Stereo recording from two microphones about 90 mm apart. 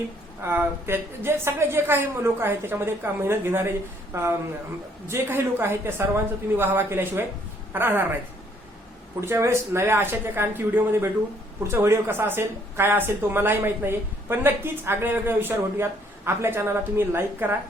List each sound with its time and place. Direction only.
0.4 s a woman's voice: 25° right (ahead or behind)
9.2 s a woman's voice: 30° right (ahead or behind)